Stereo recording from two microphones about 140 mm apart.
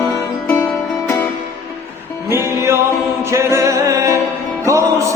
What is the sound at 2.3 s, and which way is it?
Music, 20° right (ahead or behind).